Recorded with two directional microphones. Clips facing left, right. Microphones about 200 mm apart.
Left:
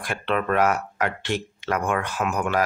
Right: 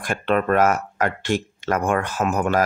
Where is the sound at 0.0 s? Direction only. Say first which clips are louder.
Right 4 dB; 45° right (ahead or behind).